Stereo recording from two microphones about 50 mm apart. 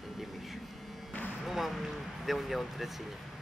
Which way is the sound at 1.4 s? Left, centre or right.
Centre.